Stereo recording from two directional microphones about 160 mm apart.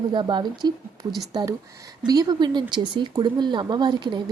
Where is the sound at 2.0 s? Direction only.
25° right (ahead or behind).